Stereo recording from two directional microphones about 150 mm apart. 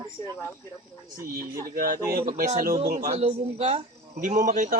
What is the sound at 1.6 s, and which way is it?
Speech, 70° right (ahead or behind).